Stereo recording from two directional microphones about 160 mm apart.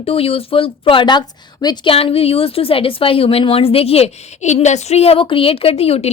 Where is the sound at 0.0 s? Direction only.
35° left (ahead or behind).